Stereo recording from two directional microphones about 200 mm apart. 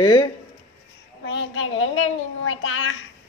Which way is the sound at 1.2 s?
65° left (ahead or behind).